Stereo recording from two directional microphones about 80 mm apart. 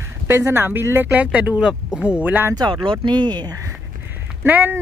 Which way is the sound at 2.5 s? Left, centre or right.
Right.